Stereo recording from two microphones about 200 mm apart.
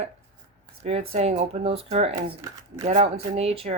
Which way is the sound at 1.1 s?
30° right (ahead or behind).